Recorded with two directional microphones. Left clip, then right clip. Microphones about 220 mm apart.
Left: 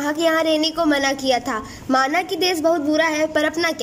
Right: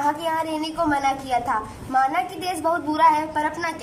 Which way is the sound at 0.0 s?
45° left (ahead or behind).